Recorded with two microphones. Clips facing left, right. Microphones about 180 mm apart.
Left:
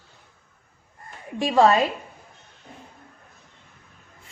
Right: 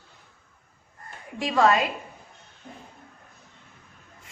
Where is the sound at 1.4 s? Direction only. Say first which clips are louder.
Left 3 dB; 30° left (ahead or behind).